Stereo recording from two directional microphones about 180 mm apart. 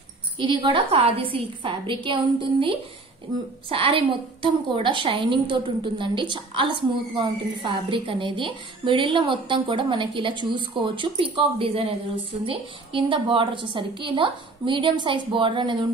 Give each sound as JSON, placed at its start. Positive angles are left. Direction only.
{"t": 0.4, "sound": "a woman's voice", "side_deg": -25}